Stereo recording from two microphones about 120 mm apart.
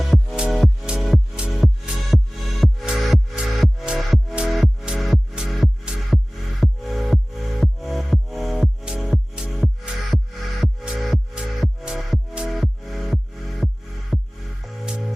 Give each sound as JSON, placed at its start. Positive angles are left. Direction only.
{"t": 0.0, "sound": "music", "side_deg": 0}